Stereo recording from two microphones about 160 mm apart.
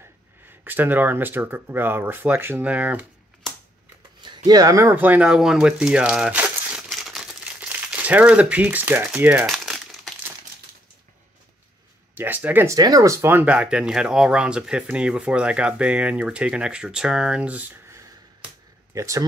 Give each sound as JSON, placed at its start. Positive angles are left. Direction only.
{"t": 0.5, "sound": "speech", "side_deg": -10}
{"t": 4.5, "sound": "speech", "side_deg": -25}
{"t": 12.2, "sound": "speech", "side_deg": -10}
{"t": 12.7, "sound": "speech", "side_deg": -20}